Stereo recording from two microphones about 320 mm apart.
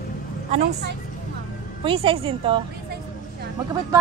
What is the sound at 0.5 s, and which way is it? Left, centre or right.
Speech, centre.